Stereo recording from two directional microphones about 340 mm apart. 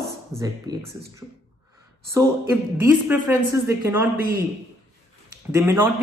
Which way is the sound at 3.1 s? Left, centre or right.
Centre.